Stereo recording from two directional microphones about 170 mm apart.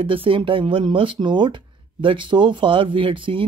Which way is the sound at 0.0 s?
30° right (ahead or behind).